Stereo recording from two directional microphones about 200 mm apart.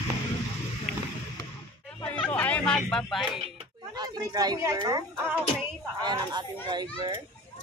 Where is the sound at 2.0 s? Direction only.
5° left (ahead or behind).